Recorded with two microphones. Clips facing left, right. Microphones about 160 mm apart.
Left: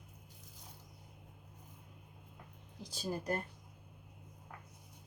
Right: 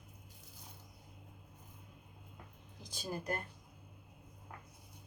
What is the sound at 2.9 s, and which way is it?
Speech, 35° left (ahead or behind).